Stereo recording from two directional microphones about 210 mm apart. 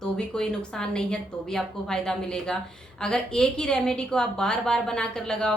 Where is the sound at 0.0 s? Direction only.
5° left (ahead or behind).